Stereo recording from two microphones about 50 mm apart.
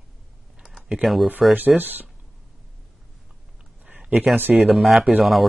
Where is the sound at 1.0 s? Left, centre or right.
Centre.